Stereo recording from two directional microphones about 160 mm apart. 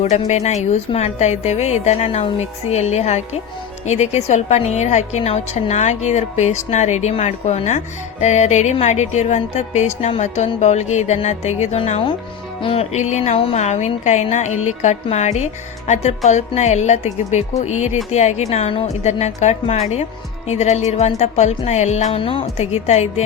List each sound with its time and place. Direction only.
0.0 s a woman's voice: 45° left (ahead or behind)